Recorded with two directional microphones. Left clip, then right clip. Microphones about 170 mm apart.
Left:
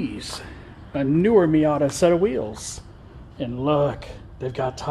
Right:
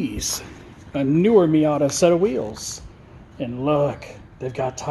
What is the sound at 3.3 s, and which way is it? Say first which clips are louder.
Speech: right 1 dB; 10° right (ahead or behind).